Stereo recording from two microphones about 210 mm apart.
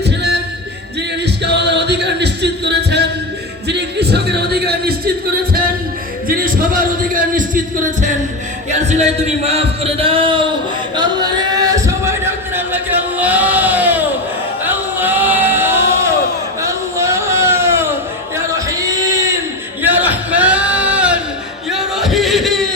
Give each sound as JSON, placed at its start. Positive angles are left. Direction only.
{"t": 0.0, "sound": "a sound", "side_deg": -50}
{"t": 1.2, "sound": "singing", "side_deg": -55}
{"t": 3.7, "sound": "speech", "side_deg": -50}
{"t": 6.2, "sound": "music", "side_deg": -40}
{"t": 8.9, "sound": "a man's voice", "side_deg": -30}
{"t": 11.5, "sound": "a sound", "side_deg": -15}